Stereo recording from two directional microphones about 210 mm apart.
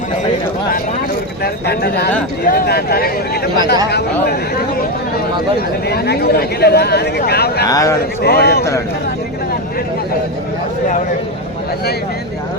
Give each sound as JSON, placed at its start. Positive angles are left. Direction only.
{"t": 1.6, "sound": "speech", "side_deg": 50}
{"t": 5.5, "sound": "speech", "side_deg": 50}
{"t": 7.7, "sound": "a man's voice", "side_deg": 15}
{"t": 8.2, "sound": "speech", "side_deg": 50}